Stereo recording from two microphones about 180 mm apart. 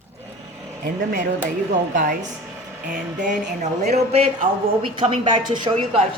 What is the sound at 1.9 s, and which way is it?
Speech, 50° right (ahead or behind).